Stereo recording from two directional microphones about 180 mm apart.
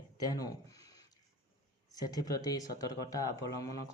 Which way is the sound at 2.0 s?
20° left (ahead or behind).